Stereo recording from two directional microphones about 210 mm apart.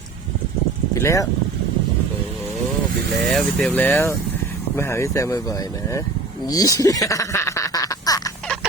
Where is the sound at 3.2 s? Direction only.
Centre (ahead or behind); by 8.3 s 15° left (ahead or behind).